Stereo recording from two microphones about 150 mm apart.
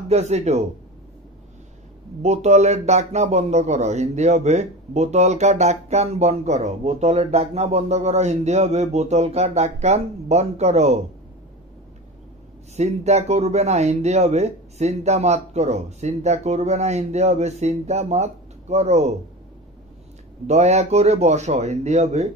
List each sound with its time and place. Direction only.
0.1 s a man's voice: 45° right (ahead or behind)
2.2 s a man's voice: 45° right (ahead or behind)
12.7 s a man's voice: 45° right (ahead or behind)
20.4 s a man's voice: 45° right (ahead or behind)